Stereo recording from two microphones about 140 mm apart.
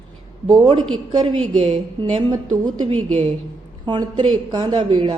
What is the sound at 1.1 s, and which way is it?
A woman's voice, 30° right (ahead or behind).